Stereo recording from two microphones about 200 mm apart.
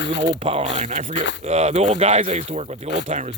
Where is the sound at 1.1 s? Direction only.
60° left (ahead or behind).